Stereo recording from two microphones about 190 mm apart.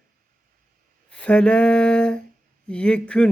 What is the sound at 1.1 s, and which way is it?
Speech, 5° left (ahead or behind).